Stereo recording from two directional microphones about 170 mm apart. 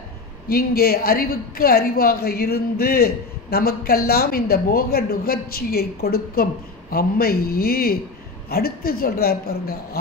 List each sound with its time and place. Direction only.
0.5 s a woman's voice: 65° left (ahead or behind)